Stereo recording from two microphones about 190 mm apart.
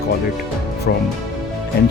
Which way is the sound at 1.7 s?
55° left (ahead or behind).